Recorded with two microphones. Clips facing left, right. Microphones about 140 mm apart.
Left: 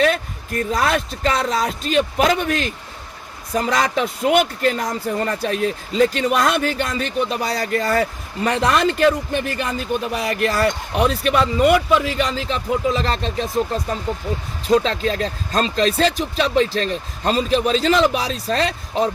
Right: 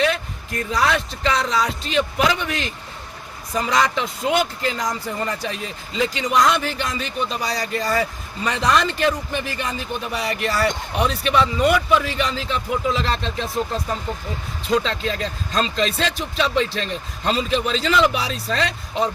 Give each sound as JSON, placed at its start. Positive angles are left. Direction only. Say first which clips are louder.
{"t": 0.0, "sound": "speech", "louder": "left 3 dB", "side_deg": 50}
{"t": 14.7, "sound": "speech", "louder": "left 4 dB", "side_deg": 40}